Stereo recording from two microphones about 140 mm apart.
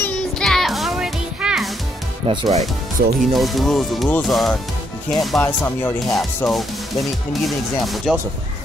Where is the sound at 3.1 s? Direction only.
Centre (ahead or behind).